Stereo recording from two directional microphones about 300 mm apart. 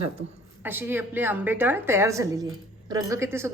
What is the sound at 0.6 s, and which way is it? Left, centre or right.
A woman's voice, centre.